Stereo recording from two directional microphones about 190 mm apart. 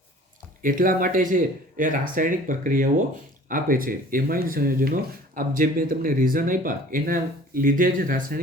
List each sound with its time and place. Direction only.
0.6 s speech: 45° right (ahead or behind)